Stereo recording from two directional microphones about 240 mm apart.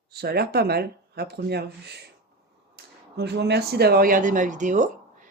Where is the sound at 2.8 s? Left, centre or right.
Right.